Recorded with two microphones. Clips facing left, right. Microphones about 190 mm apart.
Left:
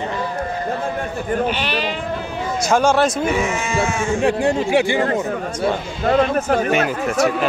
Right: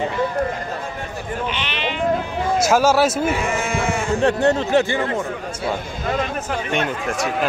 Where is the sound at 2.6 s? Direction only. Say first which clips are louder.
Left 1 dB; 5° right (ahead or behind).